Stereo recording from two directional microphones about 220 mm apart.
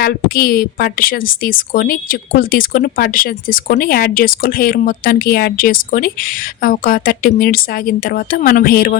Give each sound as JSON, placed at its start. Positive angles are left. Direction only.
{"t": 0.0, "sound": "a woman's voice", "side_deg": 40}